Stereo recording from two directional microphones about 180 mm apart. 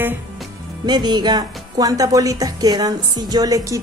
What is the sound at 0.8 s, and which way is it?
Speech, 25° right (ahead or behind).